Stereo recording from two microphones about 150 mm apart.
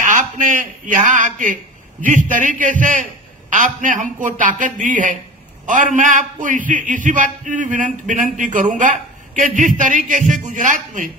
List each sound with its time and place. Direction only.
0.0 s a man's voice: 60° right (ahead or behind)